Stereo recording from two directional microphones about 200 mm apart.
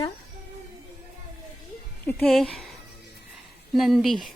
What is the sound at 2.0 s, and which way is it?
Speech, 5° left (ahead or behind).